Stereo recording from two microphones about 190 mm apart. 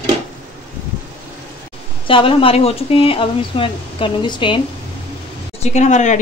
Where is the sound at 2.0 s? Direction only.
25° left (ahead or behind).